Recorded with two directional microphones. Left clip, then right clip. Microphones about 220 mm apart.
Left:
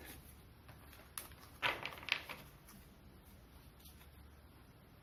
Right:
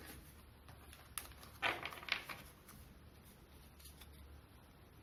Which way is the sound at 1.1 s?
20° right (ahead or behind).